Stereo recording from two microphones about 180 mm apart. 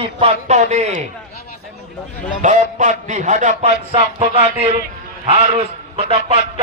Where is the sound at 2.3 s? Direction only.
45° right (ahead or behind).